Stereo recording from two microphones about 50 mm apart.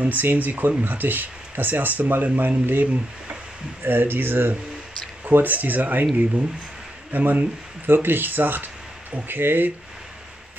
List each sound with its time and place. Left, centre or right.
0.0 s speech: right
7.1 s speech: right